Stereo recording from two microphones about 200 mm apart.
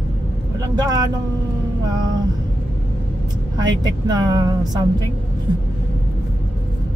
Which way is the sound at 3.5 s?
20° right (ahead or behind).